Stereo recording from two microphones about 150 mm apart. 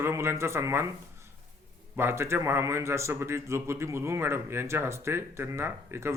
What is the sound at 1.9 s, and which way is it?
A man's voice, 15° right (ahead or behind).